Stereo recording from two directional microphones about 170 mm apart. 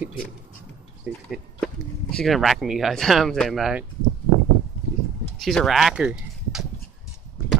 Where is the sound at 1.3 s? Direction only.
5° left (ahead or behind).